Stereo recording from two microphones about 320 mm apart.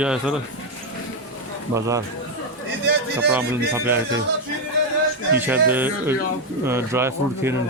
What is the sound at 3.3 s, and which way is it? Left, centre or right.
Speech, centre.